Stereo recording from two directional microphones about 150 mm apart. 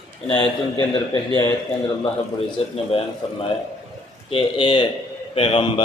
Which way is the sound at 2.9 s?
40° left (ahead or behind).